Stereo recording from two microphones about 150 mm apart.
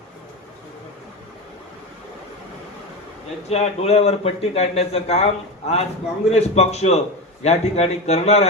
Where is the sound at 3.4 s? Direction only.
45° left (ahead or behind).